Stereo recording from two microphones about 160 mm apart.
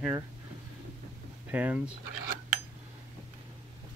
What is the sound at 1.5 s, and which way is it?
Speech, 10° right (ahead or behind).